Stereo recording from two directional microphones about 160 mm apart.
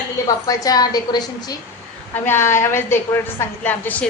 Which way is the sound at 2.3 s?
15° left (ahead or behind).